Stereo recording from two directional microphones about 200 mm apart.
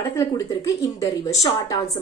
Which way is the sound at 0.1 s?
15° left (ahead or behind).